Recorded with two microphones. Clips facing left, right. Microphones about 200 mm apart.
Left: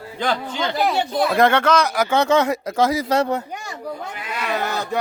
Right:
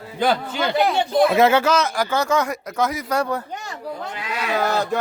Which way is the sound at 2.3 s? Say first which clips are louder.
Left 4 dB; 25° left (ahead or behind).